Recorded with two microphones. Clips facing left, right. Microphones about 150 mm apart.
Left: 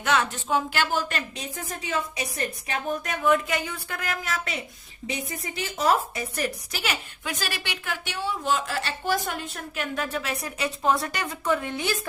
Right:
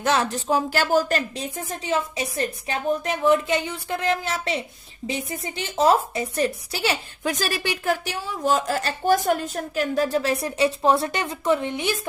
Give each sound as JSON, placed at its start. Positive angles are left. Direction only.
{"t": 0.0, "sound": "speech", "side_deg": -35}